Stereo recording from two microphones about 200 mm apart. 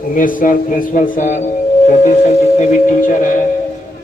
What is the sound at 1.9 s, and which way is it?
Music, 40° left (ahead or behind).